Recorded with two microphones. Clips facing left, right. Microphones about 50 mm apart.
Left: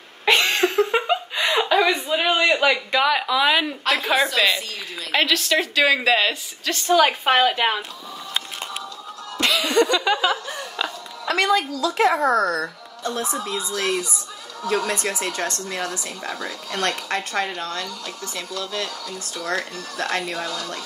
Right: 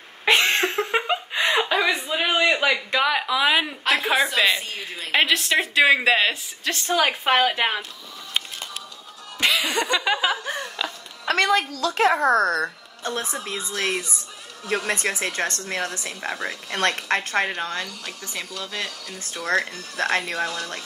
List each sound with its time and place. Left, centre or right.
0.2 s a sound: centre
0.9 s chuckle: centre
2.0 s a woman's voice: centre
9.4 s laughter: centre
10.8 s a sound: centre
11.2 s a woman's voice: right